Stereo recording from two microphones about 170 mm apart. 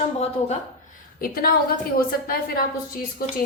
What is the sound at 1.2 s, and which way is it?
A woman's voice, 60° left (ahead or behind).